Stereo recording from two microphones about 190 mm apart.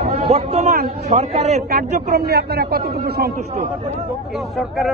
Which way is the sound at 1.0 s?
35° right (ahead or behind).